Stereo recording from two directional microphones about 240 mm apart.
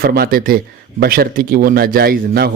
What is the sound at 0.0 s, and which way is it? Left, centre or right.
Speech, right.